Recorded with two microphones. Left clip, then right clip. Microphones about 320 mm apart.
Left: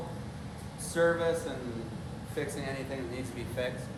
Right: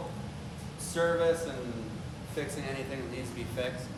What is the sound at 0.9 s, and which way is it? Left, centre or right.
Speech, centre.